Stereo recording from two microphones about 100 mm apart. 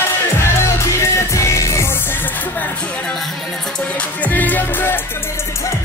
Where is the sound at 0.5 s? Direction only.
30° left (ahead or behind).